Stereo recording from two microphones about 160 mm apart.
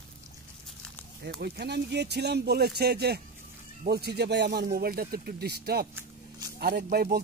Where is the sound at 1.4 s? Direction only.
90° right; by 7.2 s 70° right (ahead or behind).